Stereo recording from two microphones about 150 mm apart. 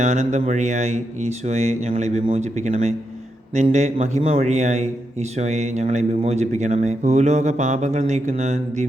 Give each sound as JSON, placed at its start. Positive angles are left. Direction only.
{"t": 0.0, "sound": "speech", "side_deg": -50}